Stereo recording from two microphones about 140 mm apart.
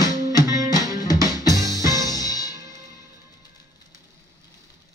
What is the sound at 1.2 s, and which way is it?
Music, 25° left (ahead or behind).